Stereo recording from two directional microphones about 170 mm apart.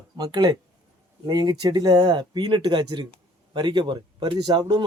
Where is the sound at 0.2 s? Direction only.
25° right (ahead or behind).